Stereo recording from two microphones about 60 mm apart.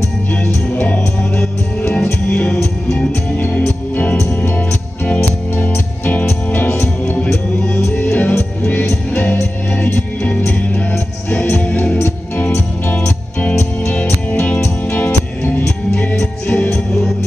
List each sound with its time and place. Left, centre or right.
0.3 s music: left
3.3 s music: left
8.1 s music: left